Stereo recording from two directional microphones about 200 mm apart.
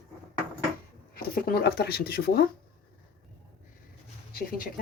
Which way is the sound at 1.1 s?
50° left (ahead or behind).